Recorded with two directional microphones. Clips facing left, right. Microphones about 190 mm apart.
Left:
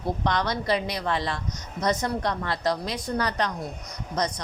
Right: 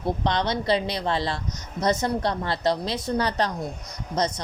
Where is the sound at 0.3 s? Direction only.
25° right (ahead or behind).